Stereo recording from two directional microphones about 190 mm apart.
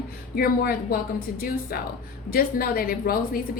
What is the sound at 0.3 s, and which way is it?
A woman's voice, 50° left (ahead or behind).